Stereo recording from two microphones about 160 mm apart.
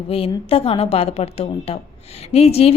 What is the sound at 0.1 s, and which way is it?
A woman's voice, 35° left (ahead or behind).